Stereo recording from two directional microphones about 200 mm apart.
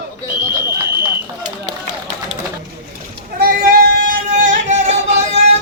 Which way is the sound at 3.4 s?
50° right (ahead or behind).